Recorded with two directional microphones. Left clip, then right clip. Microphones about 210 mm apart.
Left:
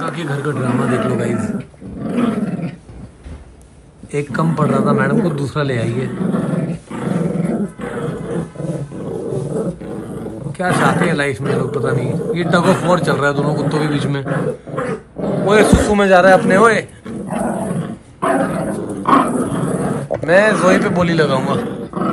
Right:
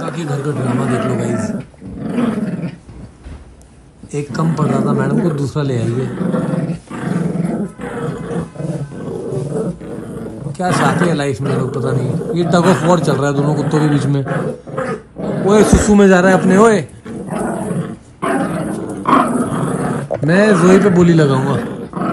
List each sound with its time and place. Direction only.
0.3 s a man's voice: centre (ahead or behind)
2.0 s dog: centre (ahead or behind)
4.3 s a man's voice: centre (ahead or behind)
4.8 s a man's voice: 15° right (ahead or behind)
5.1 s a man's voice: centre (ahead or behind)
5.7 s roar: centre (ahead or behind)
10.6 s a man's voice: centre (ahead or behind)
13.0 s a man's voice: 15° right (ahead or behind)
14.2 s dog: centre (ahead or behind)
15.6 s a man's voice: centre (ahead or behind)
15.9 s a man's voice: 40° right (ahead or behind)
17.3 s dog: centre (ahead or behind)
20.2 s a man's voice: 40° right (ahead or behind)
21.5 s roar: centre (ahead or behind)